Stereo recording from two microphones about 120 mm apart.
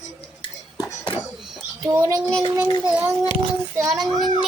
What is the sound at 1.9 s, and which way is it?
Speech, 30° right (ahead or behind).